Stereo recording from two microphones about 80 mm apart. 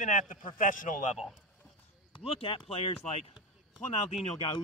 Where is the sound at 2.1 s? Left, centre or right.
Left.